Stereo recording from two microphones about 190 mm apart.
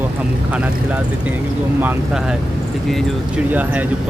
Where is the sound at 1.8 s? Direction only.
5° right (ahead or behind).